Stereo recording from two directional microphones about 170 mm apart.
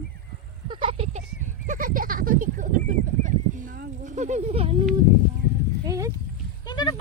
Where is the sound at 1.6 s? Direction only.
50° right (ahead or behind).